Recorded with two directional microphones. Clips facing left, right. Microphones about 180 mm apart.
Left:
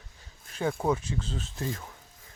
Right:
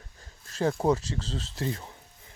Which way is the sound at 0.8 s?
35° right (ahead or behind).